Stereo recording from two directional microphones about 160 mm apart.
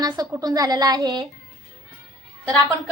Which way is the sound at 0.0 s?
25° right (ahead or behind).